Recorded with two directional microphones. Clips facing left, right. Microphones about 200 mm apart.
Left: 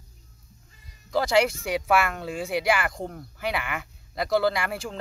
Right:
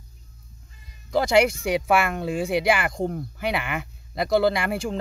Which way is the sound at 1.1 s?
15° right (ahead or behind).